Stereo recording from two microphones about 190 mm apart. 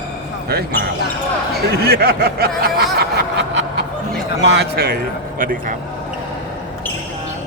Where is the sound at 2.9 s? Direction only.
65° right (ahead or behind).